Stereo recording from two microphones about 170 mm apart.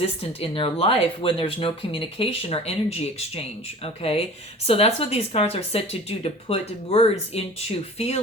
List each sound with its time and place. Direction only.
0.0 s speech: 35° left (ahead or behind)